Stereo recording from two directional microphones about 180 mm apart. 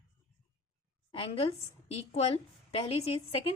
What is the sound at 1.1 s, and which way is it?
A woman's voice, 30° left (ahead or behind).